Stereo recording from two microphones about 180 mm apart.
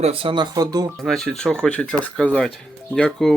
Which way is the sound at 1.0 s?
Centre (ahead or behind).